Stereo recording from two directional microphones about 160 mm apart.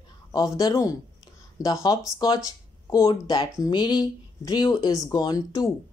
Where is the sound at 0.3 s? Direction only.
25° left (ahead or behind).